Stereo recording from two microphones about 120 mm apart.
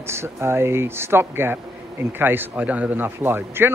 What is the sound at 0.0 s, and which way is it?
Speech, 20° right (ahead or behind).